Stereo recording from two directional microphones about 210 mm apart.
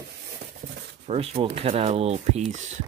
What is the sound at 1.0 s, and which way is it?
Speech, 30° right (ahead or behind).